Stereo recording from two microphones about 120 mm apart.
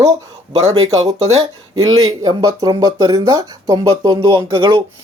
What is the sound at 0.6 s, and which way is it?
Speech, 55° right (ahead or behind).